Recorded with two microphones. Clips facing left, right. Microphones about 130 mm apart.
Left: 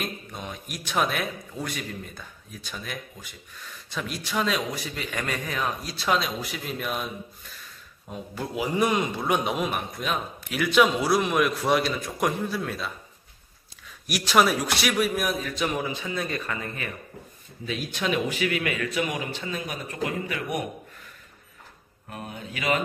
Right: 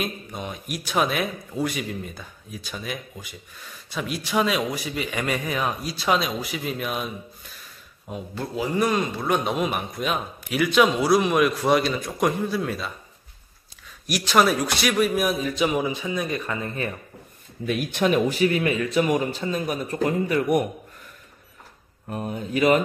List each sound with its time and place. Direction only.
0.0 s a man's voice: 5° right (ahead or behind)
8.4 s a man's voice: 15° left (ahead or behind)
9.2 s a man's voice: 5° left (ahead or behind)
9.7 s a man's voice: 5° right (ahead or behind)
14.0 s a man's voice: 5° left (ahead or behind)
15.2 s speech: 15° right (ahead or behind)
17.6 s a man's voice: 55° right (ahead or behind)
22.1 s a man's voice: 40° right (ahead or behind)